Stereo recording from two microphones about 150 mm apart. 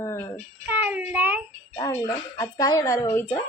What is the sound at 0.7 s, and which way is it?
Child singing, 10° right (ahead or behind).